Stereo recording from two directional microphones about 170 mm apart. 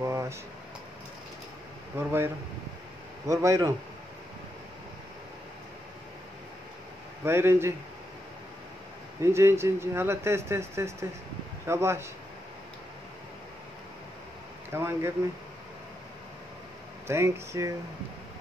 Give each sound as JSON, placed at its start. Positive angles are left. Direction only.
{"t": 0.0, "sound": "a sound", "side_deg": -15}
{"t": 2.0, "sound": "speech", "side_deg": -15}
{"t": 7.2, "sound": "speech", "side_deg": -15}
{"t": 9.2, "sound": "speech", "side_deg": -15}
{"t": 14.7, "sound": "speech", "side_deg": -15}
{"t": 17.1, "sound": "speech", "side_deg": -15}